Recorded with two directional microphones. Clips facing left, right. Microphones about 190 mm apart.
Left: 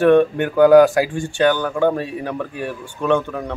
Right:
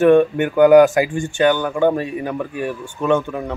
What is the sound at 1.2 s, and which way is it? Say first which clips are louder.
Speech: right 1 dB; 15° right (ahead or behind).